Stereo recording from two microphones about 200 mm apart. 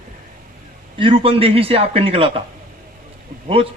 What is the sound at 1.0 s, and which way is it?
Speech, 25° right (ahead or behind).